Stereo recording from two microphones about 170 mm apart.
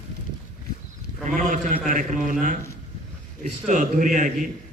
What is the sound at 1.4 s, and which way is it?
A man's voice, 50° right (ahead or behind).